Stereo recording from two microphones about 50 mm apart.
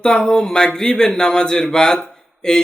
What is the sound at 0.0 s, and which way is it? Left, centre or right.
A man's voice, centre.